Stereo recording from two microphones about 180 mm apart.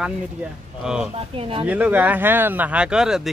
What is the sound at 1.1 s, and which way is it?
Speech, 30° right (ahead or behind).